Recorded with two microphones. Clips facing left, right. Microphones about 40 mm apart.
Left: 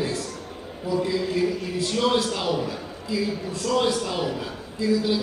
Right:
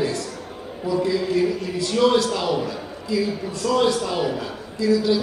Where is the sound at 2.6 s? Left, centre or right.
Centre.